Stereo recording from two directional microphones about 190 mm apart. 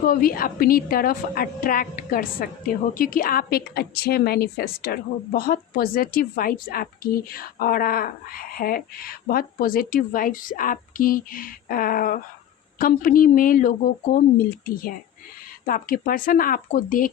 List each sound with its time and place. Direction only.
0.0 s a woman's voice: 50° left (ahead or behind)
15.6 s a woman's voice: 45° left (ahead or behind)